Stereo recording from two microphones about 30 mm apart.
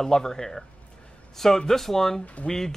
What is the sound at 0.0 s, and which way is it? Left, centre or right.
A man's voice, centre.